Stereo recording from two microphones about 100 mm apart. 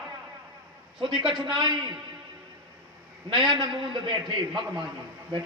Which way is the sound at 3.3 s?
50° right (ahead or behind).